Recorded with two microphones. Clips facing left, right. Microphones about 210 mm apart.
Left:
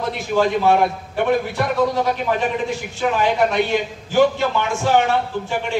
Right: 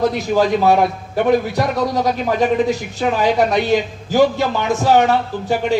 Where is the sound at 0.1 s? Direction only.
40° right (ahead or behind).